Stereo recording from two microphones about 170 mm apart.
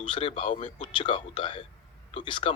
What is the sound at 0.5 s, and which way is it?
Speech, 45° left (ahead or behind).